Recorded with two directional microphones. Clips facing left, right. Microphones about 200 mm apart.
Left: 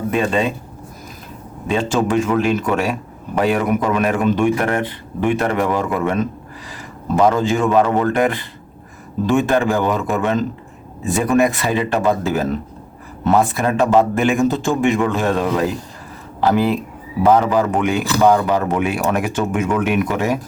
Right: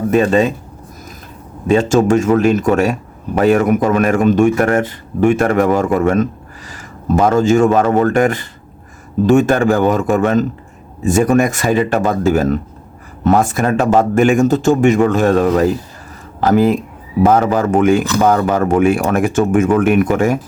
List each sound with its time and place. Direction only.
0.1 s a man's voice: 45° right (ahead or behind)
1.6 s a man's voice: 45° right (ahead or behind)